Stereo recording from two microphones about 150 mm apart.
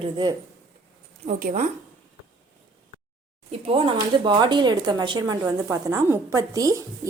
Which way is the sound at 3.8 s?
35° right (ahead or behind).